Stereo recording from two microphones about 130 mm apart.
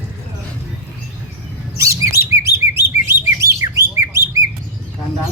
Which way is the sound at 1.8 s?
25° right (ahead or behind).